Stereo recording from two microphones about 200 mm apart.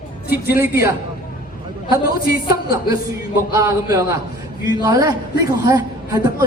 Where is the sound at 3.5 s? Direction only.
15° right (ahead or behind).